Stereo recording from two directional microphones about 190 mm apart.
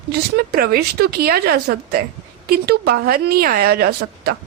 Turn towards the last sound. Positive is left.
turn(degrees=-55)  # may be behind; listen again after turning